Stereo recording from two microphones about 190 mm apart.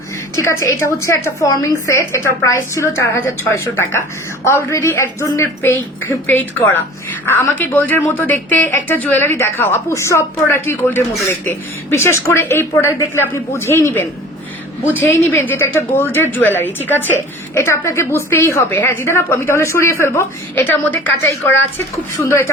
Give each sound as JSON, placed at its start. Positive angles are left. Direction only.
{"t": 0.3, "sound": "a woman's voice", "side_deg": 15}
{"t": 15.1, "sound": "a woman's voice", "side_deg": 10}